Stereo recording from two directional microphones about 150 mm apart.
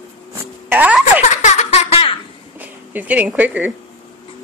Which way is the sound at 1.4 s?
50° left (ahead or behind).